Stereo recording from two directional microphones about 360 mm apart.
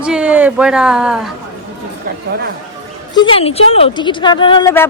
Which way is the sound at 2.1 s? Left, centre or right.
Right.